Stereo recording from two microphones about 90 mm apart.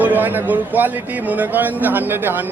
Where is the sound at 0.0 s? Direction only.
20° right (ahead or behind).